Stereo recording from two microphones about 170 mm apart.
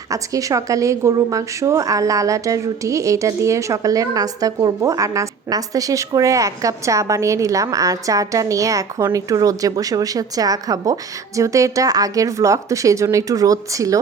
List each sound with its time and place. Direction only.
0.1 s a woman's voice: 20° right (ahead or behind)